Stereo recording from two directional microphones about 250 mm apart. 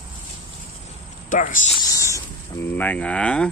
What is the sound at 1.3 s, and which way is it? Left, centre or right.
Speech, left.